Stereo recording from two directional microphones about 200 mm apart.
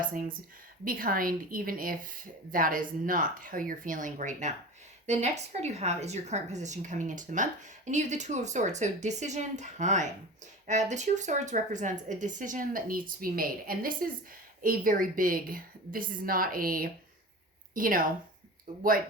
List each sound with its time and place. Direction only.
0.9 s a woman's voice: 45° right (ahead or behind)